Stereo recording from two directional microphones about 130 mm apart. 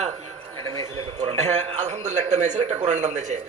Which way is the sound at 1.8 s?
60° right (ahead or behind).